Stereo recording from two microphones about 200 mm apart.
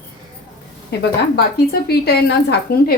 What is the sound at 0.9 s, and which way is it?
Speech, 55° left (ahead or behind).